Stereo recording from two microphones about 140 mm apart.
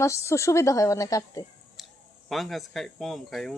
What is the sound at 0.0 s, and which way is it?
A woman's voice, 20° left (ahead or behind).